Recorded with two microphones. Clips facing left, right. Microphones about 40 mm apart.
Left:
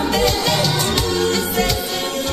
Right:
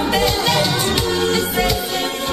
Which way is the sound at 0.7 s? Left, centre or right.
Centre.